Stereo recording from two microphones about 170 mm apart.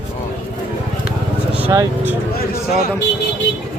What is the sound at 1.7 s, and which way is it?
Speech, 20° right (ahead or behind).